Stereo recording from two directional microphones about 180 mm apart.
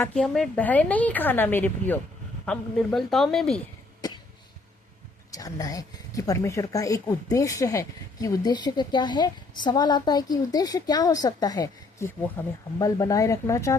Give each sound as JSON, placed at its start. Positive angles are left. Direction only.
{"t": 0.0, "sound": "a woman's voice", "side_deg": 5}
{"t": 5.3, "sound": "a woman's voice", "side_deg": 20}